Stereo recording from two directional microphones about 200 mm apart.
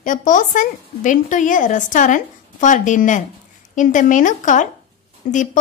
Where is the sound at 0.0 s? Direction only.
40° left (ahead or behind).